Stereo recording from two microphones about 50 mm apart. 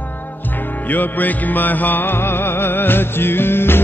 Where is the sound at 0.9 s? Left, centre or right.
Left.